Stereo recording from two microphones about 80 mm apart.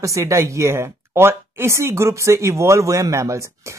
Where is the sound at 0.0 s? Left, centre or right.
Right.